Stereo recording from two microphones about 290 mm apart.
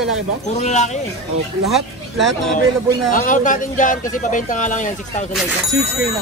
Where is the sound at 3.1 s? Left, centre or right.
Left.